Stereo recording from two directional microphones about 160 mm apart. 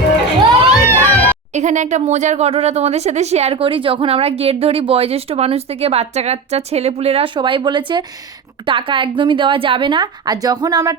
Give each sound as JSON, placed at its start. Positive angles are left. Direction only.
{"t": 0.9, "sound": "music", "side_deg": 10}
{"t": 1.5, "sound": "speech", "side_deg": -50}